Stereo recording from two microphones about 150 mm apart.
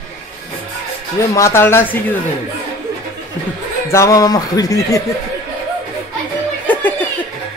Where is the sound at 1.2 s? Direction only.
20° left (ahead or behind).